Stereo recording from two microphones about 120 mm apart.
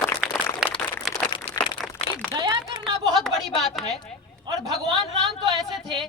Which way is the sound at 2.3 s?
35° right (ahead or behind).